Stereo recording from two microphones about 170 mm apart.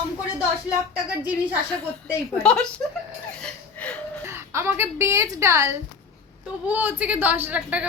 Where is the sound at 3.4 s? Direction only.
5° left (ahead or behind).